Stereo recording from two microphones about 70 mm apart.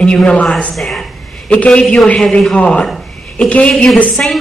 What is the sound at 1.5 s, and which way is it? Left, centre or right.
Speech, left.